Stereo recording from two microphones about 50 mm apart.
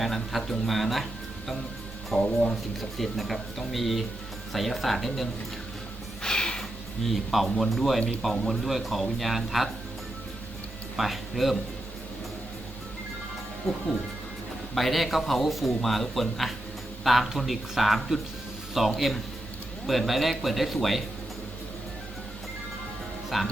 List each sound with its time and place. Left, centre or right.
0.0 s speech: centre
2.1 s speech: centre
3.0 s speech: centre
6.2 s a sound: centre
7.0 s speech: centre
10.9 s speech: centre
14.8 s speech: centre
23.3 s speech: centre